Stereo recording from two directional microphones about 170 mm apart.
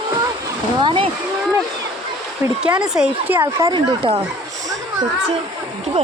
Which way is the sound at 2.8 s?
5° right (ahead or behind).